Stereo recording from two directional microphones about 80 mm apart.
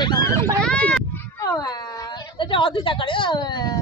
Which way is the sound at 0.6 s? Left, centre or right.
Centre.